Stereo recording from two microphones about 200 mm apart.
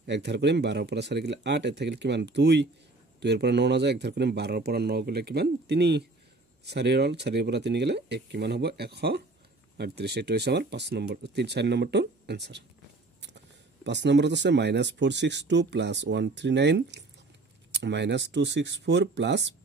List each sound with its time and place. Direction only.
0.0 s speech: 60° right (ahead or behind)
13.8 s speech: 60° right (ahead or behind)